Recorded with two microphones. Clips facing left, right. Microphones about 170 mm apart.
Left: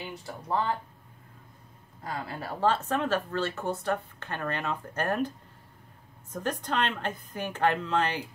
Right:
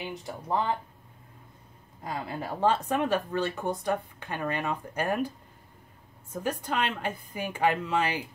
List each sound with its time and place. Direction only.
0.0 s speech: 15° right (ahead or behind)
2.0 s speech: 20° right (ahead or behind)
6.3 s speech: 10° right (ahead or behind)